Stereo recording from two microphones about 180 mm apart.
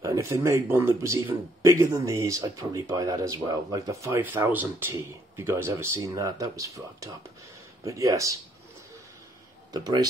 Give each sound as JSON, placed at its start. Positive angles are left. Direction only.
{"t": 0.0, "sound": "speech", "side_deg": -15}
{"t": 9.7, "sound": "speech", "side_deg": -20}